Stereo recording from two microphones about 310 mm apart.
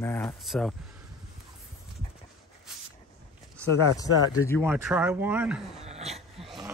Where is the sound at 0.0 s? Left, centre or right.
Centre.